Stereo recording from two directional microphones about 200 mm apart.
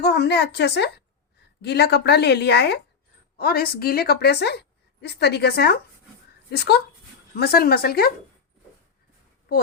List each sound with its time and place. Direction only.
0.0 s a woman's voice: 55° left (ahead or behind)